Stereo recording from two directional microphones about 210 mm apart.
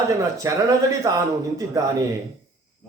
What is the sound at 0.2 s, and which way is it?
A man's voice, 15° right (ahead or behind).